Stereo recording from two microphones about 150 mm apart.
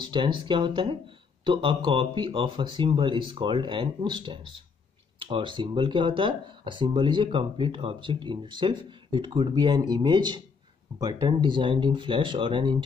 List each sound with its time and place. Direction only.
0.1 s speech: 35° right (ahead or behind)